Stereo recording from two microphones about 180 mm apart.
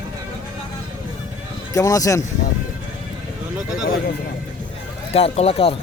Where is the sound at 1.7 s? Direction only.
20° left (ahead or behind).